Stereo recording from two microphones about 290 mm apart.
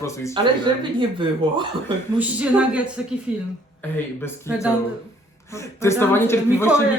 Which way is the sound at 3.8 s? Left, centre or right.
Centre.